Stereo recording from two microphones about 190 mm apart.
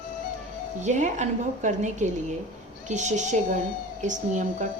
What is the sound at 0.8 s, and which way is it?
A woman's voice, 40° right (ahead or behind).